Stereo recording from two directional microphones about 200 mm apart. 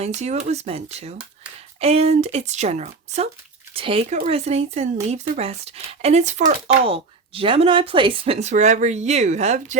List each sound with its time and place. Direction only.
0.0 s speech: 35° right (ahead or behind)